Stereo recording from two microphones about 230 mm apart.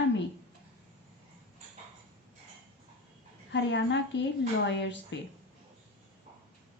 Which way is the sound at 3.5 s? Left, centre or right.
Left.